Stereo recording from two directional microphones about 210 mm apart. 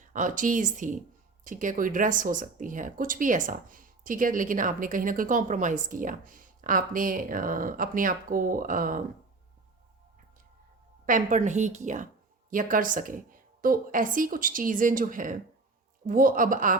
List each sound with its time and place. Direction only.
0.0 s speech: 40° right (ahead or behind)
11.0 s speech: 40° right (ahead or behind)